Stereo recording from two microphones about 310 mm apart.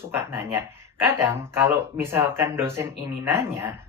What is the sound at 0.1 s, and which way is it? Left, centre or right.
Speech, centre.